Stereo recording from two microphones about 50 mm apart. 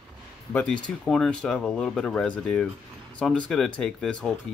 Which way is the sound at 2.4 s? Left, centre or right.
Centre.